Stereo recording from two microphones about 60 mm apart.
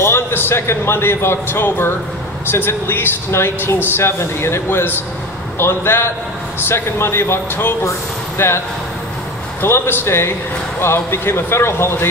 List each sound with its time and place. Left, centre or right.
0.0 s speech: left
9.6 s speech: left